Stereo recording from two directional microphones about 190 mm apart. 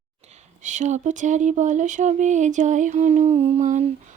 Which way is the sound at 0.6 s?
40° right (ahead or behind).